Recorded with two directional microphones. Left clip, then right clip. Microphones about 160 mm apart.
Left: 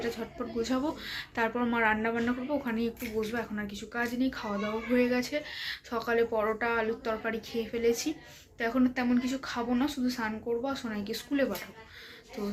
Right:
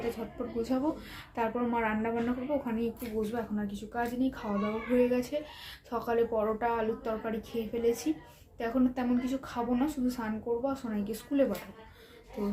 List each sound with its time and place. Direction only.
0.6 s speech: 10° right (ahead or behind)